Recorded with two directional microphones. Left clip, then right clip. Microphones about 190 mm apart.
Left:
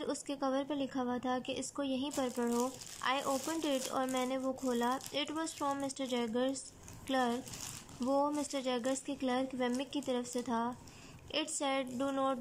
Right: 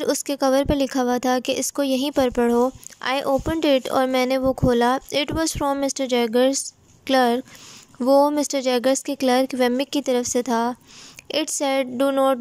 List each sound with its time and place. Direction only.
0.0 s a woman's voice: 35° right (ahead or behind)